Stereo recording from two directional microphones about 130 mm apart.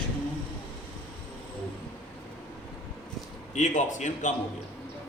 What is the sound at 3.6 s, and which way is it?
Speech, 65° left (ahead or behind).